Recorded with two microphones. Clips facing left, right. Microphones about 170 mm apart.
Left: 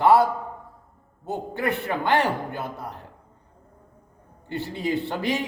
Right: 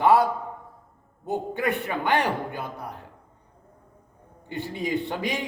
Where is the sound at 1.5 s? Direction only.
15° right (ahead or behind).